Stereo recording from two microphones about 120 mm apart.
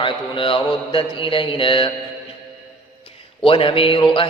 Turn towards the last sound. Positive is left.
turn(degrees=45)  # may be behind; listen again after turning